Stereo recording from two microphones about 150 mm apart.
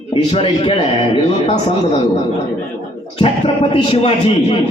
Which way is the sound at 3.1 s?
35° left (ahead or behind).